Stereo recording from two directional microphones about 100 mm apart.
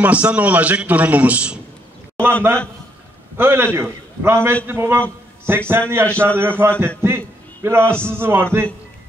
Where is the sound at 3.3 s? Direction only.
25° right (ahead or behind).